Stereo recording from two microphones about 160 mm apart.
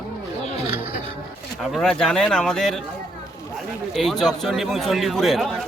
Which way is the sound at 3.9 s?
Centre (ahead or behind).